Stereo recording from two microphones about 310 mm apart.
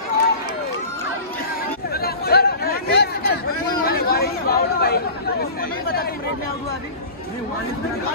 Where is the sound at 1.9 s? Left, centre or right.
Left.